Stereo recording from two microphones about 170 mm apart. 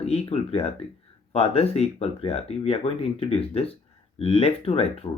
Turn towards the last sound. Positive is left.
turn(degrees=35)  # may be behind; listen again after turning